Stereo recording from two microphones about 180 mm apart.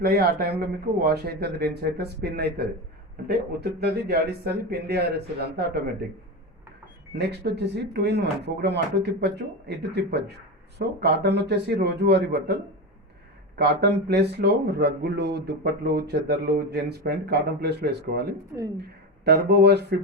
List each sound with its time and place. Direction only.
0.0 s speech: 60° right (ahead or behind)
7.2 s speech: 70° right (ahead or behind)
13.6 s speech: 65° right (ahead or behind)